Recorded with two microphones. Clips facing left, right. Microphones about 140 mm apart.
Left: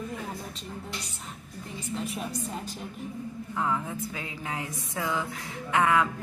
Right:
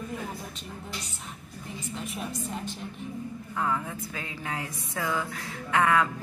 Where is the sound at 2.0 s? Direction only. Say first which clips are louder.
Left 3 dB; centre (ahead or behind).